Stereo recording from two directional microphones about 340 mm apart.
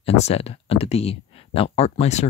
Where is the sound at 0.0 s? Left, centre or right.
Centre.